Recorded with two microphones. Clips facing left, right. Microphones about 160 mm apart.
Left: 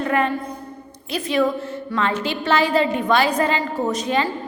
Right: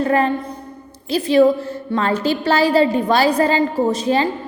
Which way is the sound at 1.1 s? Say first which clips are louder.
Right 7 dB; 35° right (ahead or behind).